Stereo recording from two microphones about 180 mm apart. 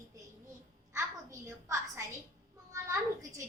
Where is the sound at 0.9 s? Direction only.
15° right (ahead or behind).